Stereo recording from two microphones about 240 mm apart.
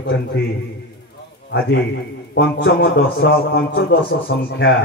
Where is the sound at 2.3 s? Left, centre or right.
Left.